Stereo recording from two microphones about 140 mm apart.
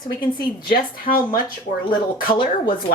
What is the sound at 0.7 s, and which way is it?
Speech, 85° left.